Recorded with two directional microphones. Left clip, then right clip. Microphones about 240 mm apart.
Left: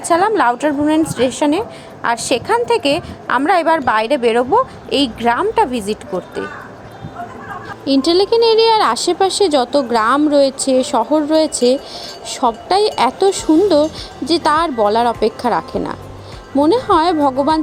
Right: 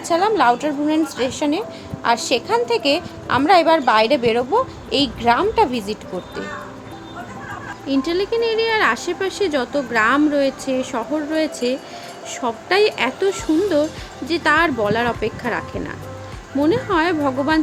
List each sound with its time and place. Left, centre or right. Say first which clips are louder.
0.1 s a woman's voice: left 3 dB; centre
7.9 s speech: left 7 dB; left